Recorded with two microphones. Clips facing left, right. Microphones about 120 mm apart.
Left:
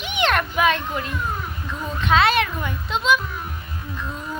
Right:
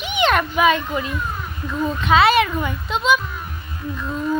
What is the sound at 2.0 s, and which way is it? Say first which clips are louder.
A child's voice: right 3 dB; 5° right (ahead or behind).